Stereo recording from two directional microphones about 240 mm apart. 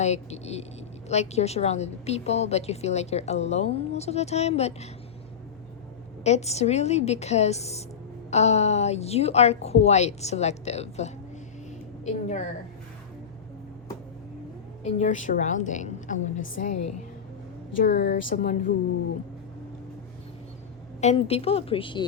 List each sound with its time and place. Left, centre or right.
0.0 s a woman's voice: left
6.2 s a woman's voice: left
14.8 s a woman's voice: left
17.7 s speech: left
18.1 s a woman's voice: left
21.0 s a woman's voice: left